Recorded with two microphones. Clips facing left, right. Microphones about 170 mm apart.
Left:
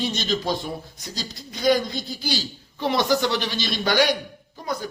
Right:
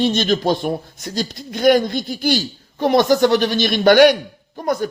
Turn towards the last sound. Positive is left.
turn(degrees=-55)  # may be behind; listen again after turning